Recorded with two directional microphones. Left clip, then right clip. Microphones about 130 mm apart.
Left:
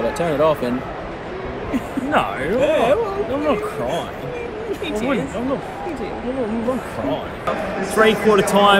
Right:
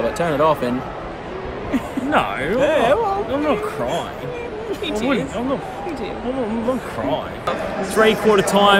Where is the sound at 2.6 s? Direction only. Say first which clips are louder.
Even; 35° right (ahead or behind).